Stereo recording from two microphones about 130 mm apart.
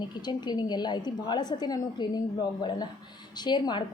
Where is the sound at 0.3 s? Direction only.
35° left (ahead or behind).